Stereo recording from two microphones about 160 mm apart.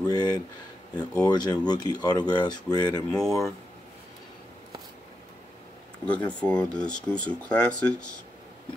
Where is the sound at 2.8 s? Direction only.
5° left (ahead or behind).